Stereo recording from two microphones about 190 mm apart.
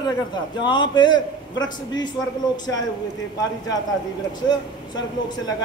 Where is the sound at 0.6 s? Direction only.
25° left (ahead or behind).